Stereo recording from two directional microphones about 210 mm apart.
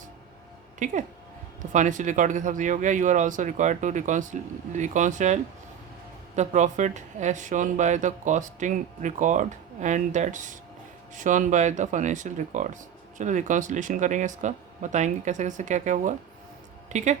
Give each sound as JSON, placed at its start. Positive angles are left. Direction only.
{"t": 0.8, "sound": "speech", "side_deg": -35}